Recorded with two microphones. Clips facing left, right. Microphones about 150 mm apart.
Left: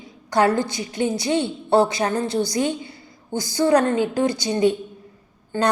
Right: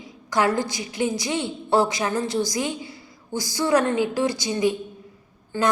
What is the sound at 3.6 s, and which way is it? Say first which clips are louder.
Speech: left 3 dB; 35° left (ahead or behind).